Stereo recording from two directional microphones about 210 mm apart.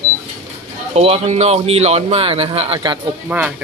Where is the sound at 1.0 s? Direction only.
30° right (ahead or behind).